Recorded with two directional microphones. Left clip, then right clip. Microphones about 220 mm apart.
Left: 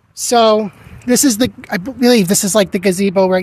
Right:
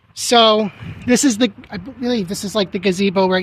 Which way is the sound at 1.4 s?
35° left (ahead or behind).